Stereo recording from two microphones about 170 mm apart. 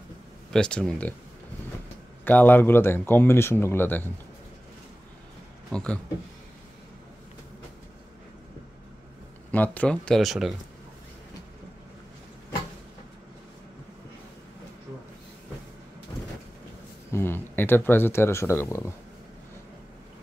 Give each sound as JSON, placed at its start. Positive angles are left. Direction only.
{"t": 0.5, "sound": "speech", "side_deg": 5}
{"t": 2.2, "sound": "speech", "side_deg": 10}
{"t": 5.7, "sound": "speech", "side_deg": 5}
{"t": 9.5, "sound": "speech", "side_deg": 10}
{"t": 16.1, "sound": "vehicle", "side_deg": 20}
{"t": 17.1, "sound": "speech", "side_deg": 15}